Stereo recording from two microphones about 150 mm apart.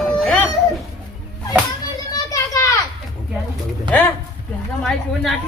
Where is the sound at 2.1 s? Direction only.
20° left (ahead or behind).